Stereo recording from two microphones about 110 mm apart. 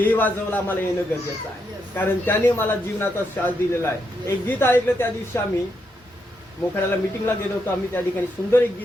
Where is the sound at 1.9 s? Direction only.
20° left (ahead or behind).